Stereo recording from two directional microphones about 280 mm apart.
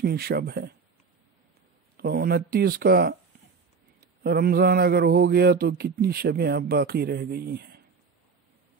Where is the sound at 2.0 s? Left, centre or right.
Right.